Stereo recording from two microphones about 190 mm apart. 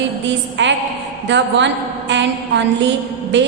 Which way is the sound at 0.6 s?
75° right (ahead or behind).